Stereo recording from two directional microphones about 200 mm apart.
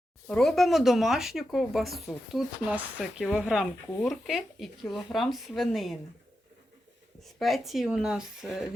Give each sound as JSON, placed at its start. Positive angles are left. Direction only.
{"t": 0.3, "sound": "speech", "side_deg": 0}
{"t": 7.3, "sound": "speech", "side_deg": 0}